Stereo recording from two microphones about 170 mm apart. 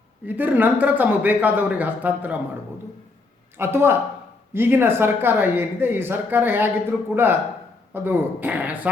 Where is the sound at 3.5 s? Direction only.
15° right (ahead or behind).